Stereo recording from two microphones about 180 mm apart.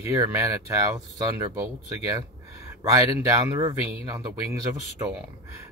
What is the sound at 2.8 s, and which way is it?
Speech, 15° right (ahead or behind).